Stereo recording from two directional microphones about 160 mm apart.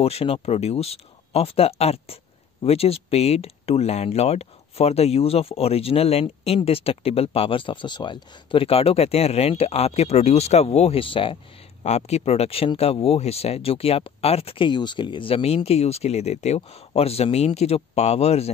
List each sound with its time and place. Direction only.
0.0 s speech: 40° left (ahead or behind)